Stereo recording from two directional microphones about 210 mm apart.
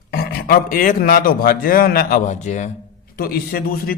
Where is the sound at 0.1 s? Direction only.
45° left (ahead or behind).